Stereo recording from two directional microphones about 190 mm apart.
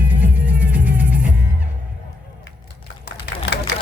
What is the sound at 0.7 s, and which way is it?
Music, 10° right (ahead or behind).